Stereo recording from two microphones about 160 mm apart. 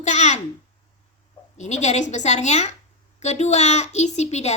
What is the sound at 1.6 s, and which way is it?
A child's voice, 45° left (ahead or behind).